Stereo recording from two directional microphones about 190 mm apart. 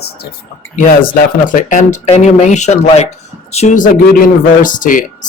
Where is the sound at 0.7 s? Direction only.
45° left (ahead or behind).